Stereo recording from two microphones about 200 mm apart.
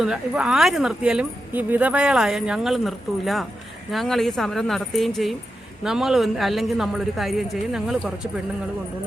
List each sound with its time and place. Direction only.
0.0 s speech: 5° right (ahead or behind)